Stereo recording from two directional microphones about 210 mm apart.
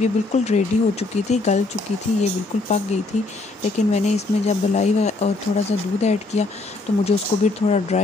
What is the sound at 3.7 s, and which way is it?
Speech, 35° left (ahead or behind).